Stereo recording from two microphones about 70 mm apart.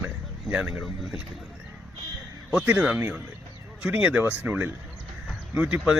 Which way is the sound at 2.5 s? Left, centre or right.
Centre.